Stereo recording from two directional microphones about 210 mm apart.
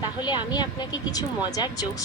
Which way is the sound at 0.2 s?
20° left (ahead or behind).